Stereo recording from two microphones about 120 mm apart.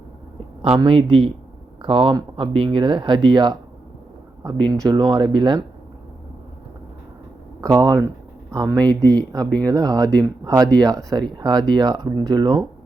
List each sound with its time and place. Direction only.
0.8 s speech: 40° right (ahead or behind)
7.6 s speech: 30° right (ahead or behind)